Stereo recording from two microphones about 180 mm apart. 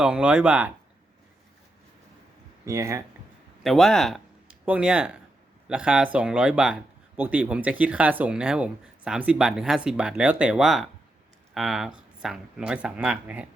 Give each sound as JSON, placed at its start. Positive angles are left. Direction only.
{"t": 0.0, "sound": "speech", "side_deg": -5}
{"t": 2.6, "sound": "speech", "side_deg": -15}
{"t": 3.6, "sound": "speech", "side_deg": 0}